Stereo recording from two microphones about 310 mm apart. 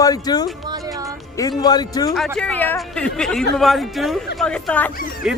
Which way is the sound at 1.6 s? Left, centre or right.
Centre.